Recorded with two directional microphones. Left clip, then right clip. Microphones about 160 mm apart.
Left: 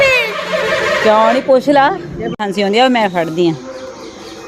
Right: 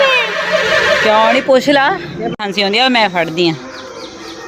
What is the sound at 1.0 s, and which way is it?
Speech, 25° left (ahead or behind).